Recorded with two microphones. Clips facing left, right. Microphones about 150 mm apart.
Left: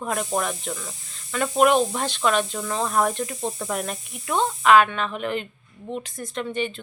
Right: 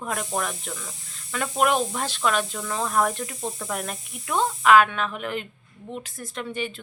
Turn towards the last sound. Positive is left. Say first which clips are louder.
# left 4 dB
turn(degrees=-5)  # may be behind; listen again after turning